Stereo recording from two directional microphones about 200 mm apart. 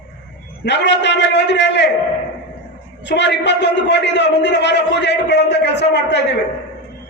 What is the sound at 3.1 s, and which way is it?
A man's voice, 60° left (ahead or behind).